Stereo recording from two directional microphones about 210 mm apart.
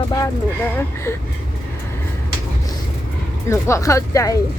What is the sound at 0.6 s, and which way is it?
Speech, 10° left (ahead or behind).